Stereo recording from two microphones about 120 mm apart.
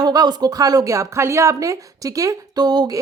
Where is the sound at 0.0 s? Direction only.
35° right (ahead or behind).